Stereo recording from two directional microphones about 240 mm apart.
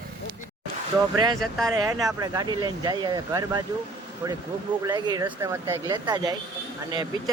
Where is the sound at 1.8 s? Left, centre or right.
Centre.